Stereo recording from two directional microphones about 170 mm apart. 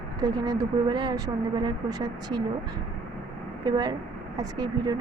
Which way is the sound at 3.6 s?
25° right (ahead or behind).